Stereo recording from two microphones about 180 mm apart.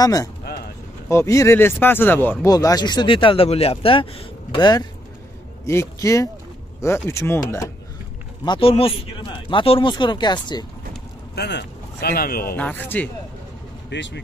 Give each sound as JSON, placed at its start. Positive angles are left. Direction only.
{"t": 0.0, "sound": "speech", "side_deg": 20}
{"t": 8.5, "sound": "speech", "side_deg": 30}
{"t": 11.3, "sound": "speech", "side_deg": 65}
{"t": 12.5, "sound": "speech", "side_deg": 10}
{"t": 13.8, "sound": "speech", "side_deg": 80}